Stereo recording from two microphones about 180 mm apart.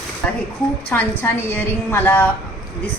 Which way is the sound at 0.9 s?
10° left (ahead or behind).